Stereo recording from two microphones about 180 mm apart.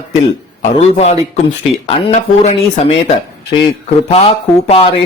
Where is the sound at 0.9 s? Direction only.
35° left (ahead or behind).